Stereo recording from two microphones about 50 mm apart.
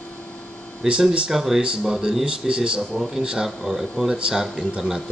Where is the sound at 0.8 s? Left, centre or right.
Centre.